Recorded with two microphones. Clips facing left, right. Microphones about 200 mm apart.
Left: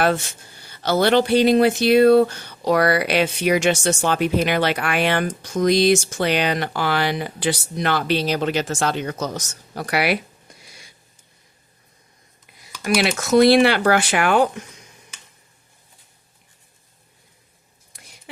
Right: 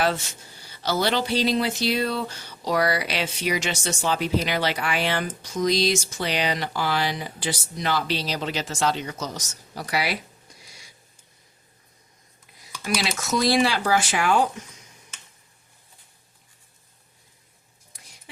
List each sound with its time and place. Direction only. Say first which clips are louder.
0.6 s speech: left 6 dB; 55° left (ahead or behind)
12.8 s speech: left 7 dB; 60° left (ahead or behind)